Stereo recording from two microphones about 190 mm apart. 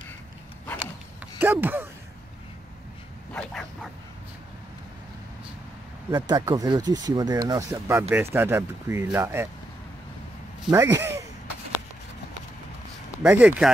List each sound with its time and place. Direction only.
1.4 s speech: 10° right (ahead or behind)
3.3 s bow-wow: 5° left (ahead or behind)
6.0 s speech: 20° right (ahead or behind)
10.7 s speech: 15° right (ahead or behind)
13.2 s speech: 10° right (ahead or behind)